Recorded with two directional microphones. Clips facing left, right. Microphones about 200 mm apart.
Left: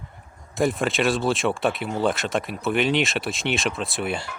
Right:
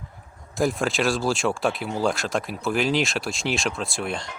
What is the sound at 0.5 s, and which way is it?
Speech, centre (ahead or behind).